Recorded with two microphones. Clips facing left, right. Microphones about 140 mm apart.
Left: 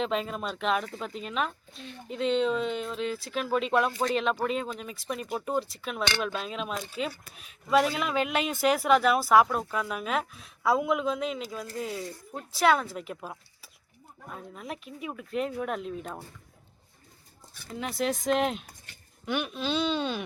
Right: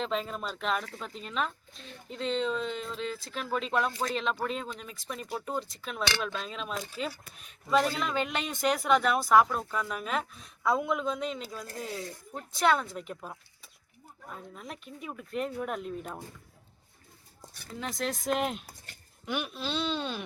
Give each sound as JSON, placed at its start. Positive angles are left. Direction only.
{"t": 0.0, "sound": "speech", "side_deg": 5}
{"t": 5.5, "sound": "speech", "side_deg": 5}
{"t": 17.7, "sound": "speech", "side_deg": 5}